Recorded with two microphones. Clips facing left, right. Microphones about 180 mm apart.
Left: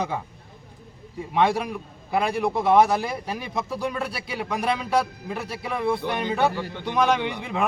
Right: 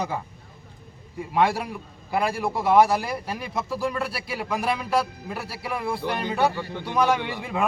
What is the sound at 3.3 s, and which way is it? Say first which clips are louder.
Speech: left 1 dB; 20° left (ahead or behind).